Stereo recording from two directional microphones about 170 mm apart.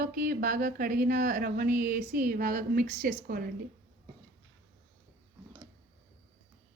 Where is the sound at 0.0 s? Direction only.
55° right (ahead or behind).